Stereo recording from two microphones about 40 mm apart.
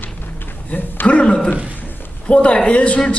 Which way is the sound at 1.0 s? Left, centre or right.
Left.